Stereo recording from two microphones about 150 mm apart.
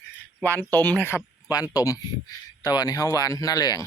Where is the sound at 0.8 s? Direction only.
10° left (ahead or behind).